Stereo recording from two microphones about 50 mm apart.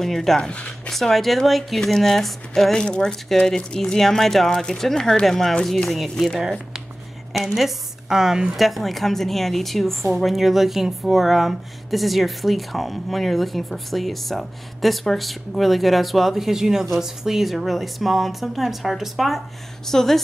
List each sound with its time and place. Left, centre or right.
0.0 s speech: centre
0.4 s speech: left
0.8 s a woman's voice: centre
2.7 s a woman's voice: centre
7.5 s speech: centre
8.6 s a woman's voice: centre
19.9 s speech: centre